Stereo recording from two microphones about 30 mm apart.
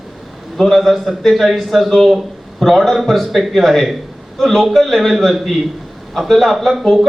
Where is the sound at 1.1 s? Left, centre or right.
Centre.